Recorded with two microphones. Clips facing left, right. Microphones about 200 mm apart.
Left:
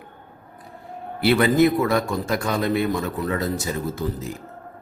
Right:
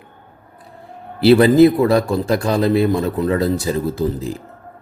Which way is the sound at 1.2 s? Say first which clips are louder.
Right 7 dB; 30° right (ahead or behind).